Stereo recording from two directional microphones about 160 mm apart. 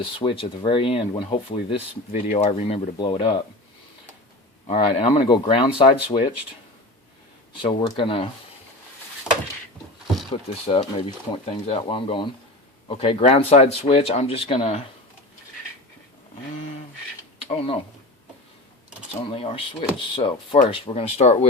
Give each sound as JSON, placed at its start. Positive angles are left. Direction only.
{"t": 0.0, "sound": "speech", "side_deg": 30}
{"t": 2.1, "sound": "speech", "side_deg": 50}
{"t": 4.7, "sound": "speech", "side_deg": 35}
{"t": 7.6, "sound": "speech", "side_deg": 30}
{"t": 10.5, "sound": "speech", "side_deg": 40}
{"t": 17.5, "sound": "speech", "side_deg": 35}
{"t": 19.3, "sound": "speech", "side_deg": 35}